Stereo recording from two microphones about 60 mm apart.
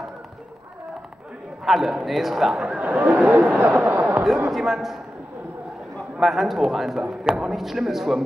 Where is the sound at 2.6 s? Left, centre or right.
Right.